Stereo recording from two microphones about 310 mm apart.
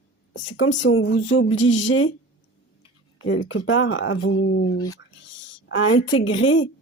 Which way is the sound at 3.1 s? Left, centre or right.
Left.